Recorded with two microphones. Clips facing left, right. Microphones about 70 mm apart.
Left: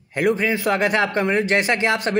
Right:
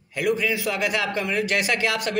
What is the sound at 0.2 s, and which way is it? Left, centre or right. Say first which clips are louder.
A man's voice: left 4 dB; left.